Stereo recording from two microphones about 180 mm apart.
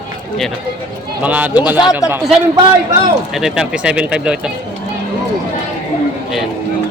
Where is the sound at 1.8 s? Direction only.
20° left (ahead or behind).